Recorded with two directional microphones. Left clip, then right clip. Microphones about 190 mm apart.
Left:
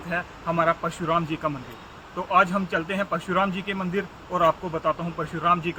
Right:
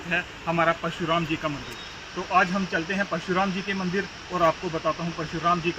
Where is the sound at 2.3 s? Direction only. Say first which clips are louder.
Left 2 dB; 10° left (ahead or behind).